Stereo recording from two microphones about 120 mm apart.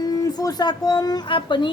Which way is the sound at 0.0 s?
30° left (ahead or behind).